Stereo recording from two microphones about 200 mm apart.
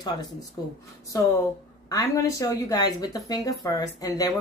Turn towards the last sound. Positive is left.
turn(degrees=15)  # may be behind; listen again after turning